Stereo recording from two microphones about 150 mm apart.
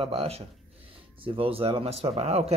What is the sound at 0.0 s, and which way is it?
Speech, 40° right (ahead or behind).